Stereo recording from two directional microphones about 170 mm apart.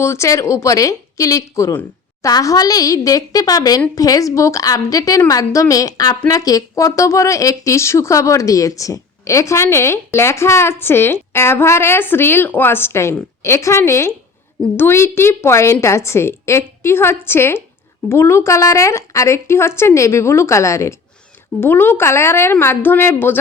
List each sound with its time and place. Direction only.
0.0 s a woman's voice: 15° left (ahead or behind)